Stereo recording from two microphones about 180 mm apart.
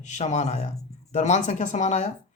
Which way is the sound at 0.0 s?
40° left (ahead or behind).